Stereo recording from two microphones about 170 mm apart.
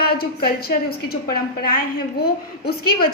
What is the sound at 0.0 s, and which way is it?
A woman's voice, 65° left (ahead or behind).